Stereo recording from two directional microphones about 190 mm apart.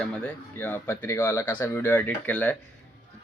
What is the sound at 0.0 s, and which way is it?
Speech, 5° left (ahead or behind).